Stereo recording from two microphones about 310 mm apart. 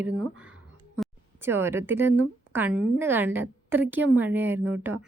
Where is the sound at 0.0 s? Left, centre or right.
Centre.